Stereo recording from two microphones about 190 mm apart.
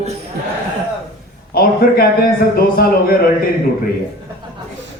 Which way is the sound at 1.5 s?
50° left (ahead or behind).